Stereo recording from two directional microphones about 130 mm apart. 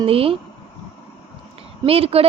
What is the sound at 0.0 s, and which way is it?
Speech, 45° right (ahead or behind).